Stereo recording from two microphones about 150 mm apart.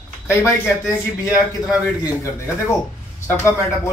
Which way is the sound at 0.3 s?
20° left (ahead or behind).